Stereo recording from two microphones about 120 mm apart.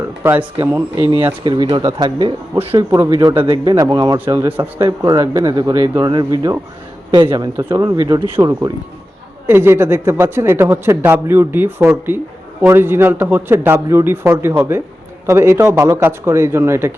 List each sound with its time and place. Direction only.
0.2 s a man's voice: 20° right (ahead or behind)
1.7 s speech: 35° right (ahead or behind)
4.4 s speech: 15° right (ahead or behind)
4.9 s speech: 35° right (ahead or behind)
7.5 s a man's voice: 25° right (ahead or behind)
9.5 s a man's voice: 20° right (ahead or behind)